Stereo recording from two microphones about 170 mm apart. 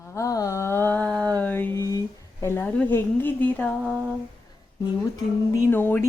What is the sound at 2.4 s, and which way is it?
A woman's voice, 15° left (ahead or behind).